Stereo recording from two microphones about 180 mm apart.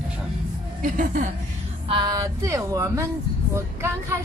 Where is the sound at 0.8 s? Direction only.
45° right (ahead or behind).